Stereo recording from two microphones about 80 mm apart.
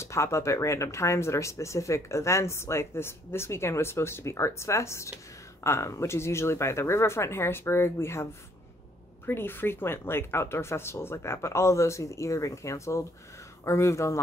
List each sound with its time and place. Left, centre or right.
0.0 s speech: left